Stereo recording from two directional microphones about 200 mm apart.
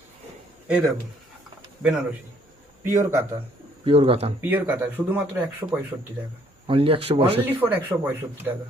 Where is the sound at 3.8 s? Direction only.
25° right (ahead or behind).